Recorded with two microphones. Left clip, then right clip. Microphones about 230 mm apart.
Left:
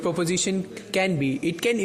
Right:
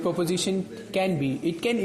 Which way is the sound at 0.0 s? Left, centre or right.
Left.